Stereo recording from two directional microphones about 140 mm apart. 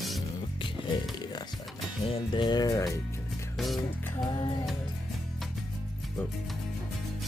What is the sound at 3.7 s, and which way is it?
Music, 30° left (ahead or behind).